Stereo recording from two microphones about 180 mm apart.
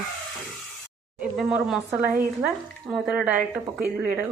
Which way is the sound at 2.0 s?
50° right (ahead or behind).